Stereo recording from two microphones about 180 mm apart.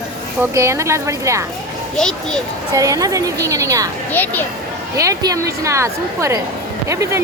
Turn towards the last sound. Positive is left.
turn(degrees=-15)  # may be behind; listen again after turning